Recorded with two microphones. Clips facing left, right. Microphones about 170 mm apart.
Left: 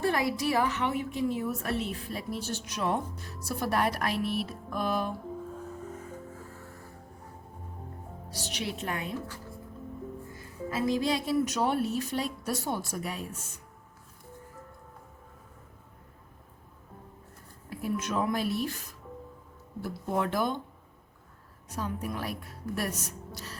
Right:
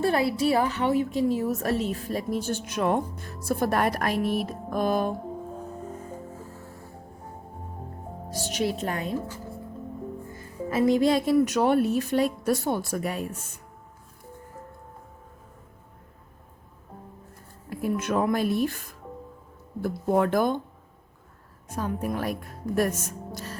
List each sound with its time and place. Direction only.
0.0 s a woman's voice: 30° right (ahead or behind); by 5.1 s 45° right (ahead or behind)
8.3 s a woman's voice: 45° right (ahead or behind)
10.3 s speech: 55° right (ahead or behind)
17.7 s a woman's voice: 55° right (ahead or behind)
21.7 s a woman's voice: 50° right (ahead or behind)